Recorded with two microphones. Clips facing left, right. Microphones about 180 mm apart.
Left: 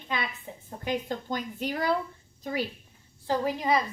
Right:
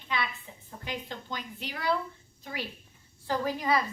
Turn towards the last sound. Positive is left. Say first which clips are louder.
# left 2 dB
turn(degrees=20)  # may be behind; listen again after turning